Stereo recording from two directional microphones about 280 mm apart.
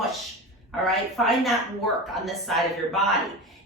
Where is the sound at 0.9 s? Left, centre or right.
Centre.